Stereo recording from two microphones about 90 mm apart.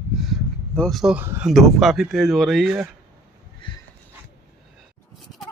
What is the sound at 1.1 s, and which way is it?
Speech, 25° right (ahead or behind).